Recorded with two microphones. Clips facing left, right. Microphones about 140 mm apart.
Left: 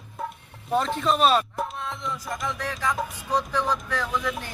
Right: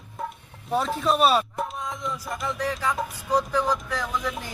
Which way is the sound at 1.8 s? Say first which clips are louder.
Right 1 dB; 10° right (ahead or behind).